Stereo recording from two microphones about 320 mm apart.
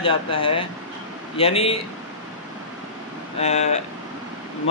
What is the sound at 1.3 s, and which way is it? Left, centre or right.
Speech, centre.